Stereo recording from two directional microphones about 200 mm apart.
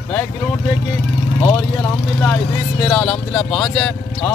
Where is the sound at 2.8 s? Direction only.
5° left (ahead or behind).